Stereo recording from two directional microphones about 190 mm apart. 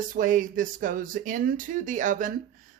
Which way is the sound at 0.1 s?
45° right (ahead or behind).